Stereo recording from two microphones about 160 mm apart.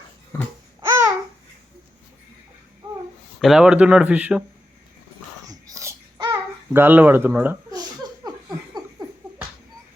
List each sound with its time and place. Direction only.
0.9 s babbling: 15° right (ahead or behind)
3.4 s speech: 5° right (ahead or behind)
5.5 s babbling: 20° right (ahead or behind)
6.7 s speech: 10° right (ahead or behind)
7.7 s laughter: 25° right (ahead or behind)